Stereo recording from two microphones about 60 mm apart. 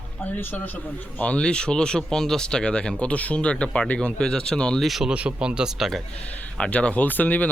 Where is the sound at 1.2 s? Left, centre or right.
Centre.